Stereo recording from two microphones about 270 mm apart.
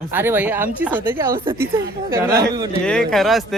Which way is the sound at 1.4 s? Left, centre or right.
Centre.